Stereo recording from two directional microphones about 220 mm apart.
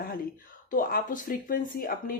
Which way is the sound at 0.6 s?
40° left (ahead or behind).